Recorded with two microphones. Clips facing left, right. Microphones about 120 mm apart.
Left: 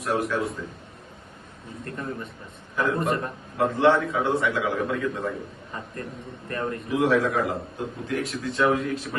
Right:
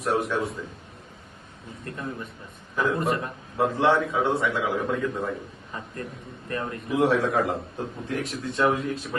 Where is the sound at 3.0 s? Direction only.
Centre (ahead or behind).